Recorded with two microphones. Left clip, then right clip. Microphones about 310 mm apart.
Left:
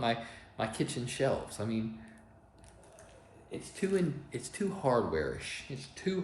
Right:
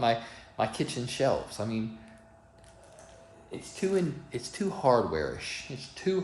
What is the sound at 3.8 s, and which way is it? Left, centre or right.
Speech, centre.